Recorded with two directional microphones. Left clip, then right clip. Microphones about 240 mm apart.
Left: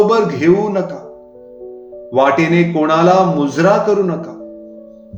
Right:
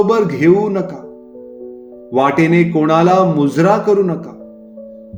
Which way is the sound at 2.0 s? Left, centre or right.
Right.